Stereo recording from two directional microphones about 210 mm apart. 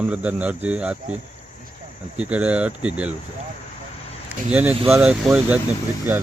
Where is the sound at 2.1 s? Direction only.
5° right (ahead or behind).